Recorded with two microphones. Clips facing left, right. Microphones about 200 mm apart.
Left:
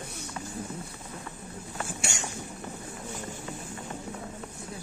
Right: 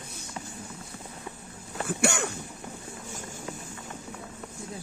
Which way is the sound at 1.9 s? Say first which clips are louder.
Right 9 dB; 60° right (ahead or behind).